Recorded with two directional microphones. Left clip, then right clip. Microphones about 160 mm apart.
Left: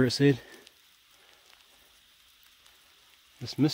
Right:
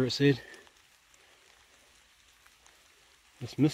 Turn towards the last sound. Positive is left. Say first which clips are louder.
# left 1 dB
turn(degrees=30)  # may be behind; listen again after turning